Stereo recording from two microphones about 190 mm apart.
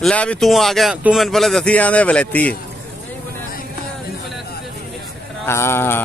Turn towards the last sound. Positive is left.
turn(degrees=10)  # may be behind; listen again after turning